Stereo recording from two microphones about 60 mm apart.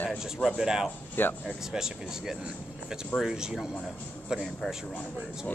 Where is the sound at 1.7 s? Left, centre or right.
Centre.